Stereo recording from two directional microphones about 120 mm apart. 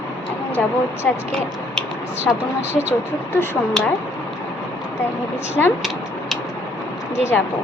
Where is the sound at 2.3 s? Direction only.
10° left (ahead or behind).